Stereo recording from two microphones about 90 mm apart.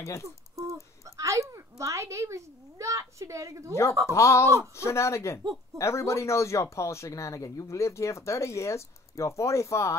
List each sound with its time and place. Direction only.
0.0 s speech: 35° left (ahead or behind)
1.0 s a child's voice: 35° right (ahead or behind)
4.0 s speech: 35° left (ahead or behind)